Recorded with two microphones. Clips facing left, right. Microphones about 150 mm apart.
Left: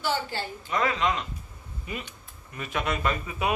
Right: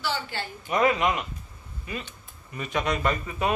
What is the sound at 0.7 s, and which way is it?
Speech, 20° right (ahead or behind).